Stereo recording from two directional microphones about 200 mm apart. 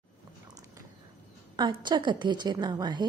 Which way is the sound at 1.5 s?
20° right (ahead or behind).